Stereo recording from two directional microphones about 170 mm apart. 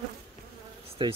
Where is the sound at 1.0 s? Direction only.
25° right (ahead or behind).